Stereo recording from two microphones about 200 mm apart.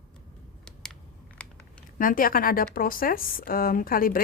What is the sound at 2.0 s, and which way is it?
Speech, 45° left (ahead or behind).